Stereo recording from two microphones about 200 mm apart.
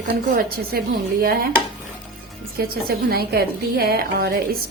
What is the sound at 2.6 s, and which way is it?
A woman's voice, 50° right (ahead or behind).